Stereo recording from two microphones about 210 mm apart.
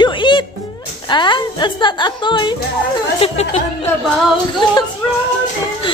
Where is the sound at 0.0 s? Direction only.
20° left (ahead or behind).